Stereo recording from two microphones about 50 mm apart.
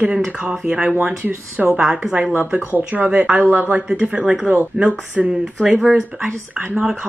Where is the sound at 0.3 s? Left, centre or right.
Right.